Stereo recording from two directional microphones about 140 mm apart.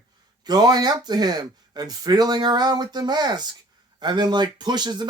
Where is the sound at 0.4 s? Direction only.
30° right (ahead or behind).